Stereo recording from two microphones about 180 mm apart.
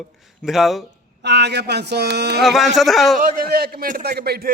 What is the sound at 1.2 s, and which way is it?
Speech, 70° right (ahead or behind).